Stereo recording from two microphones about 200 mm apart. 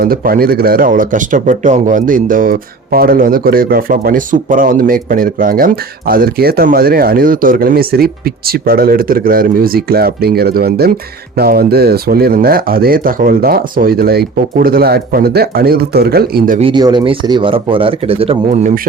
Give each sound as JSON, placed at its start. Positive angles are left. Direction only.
{"t": 0.0, "sound": "speech", "side_deg": -50}
{"t": 16.6, "sound": "speech", "side_deg": -25}